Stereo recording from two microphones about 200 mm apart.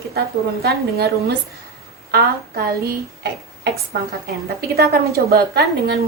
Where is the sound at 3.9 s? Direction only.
50° right (ahead or behind).